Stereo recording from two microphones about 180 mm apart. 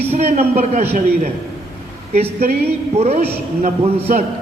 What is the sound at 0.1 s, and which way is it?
Speech, 40° right (ahead or behind).